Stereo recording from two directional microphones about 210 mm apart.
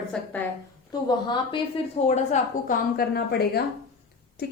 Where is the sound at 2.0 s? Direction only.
35° left (ahead or behind).